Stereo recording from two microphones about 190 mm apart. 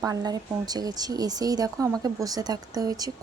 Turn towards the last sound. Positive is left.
turn(degrees=-20)  # may be behind; listen again after turning